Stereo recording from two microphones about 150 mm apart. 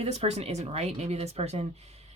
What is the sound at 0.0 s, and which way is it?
Speech, 45° right (ahead or behind).